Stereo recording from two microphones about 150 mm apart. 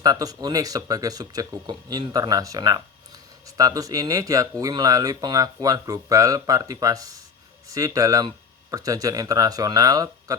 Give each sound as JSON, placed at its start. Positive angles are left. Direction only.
{"t": 0.0, "sound": "speech", "side_deg": -25}